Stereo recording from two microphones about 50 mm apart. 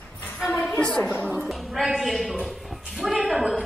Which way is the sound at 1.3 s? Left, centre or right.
Centre.